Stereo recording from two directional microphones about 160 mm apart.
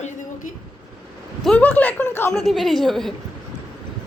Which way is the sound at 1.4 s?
10° left (ahead or behind).